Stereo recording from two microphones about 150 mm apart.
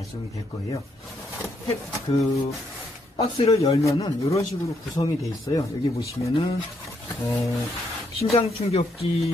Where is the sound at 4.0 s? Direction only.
20° left (ahead or behind).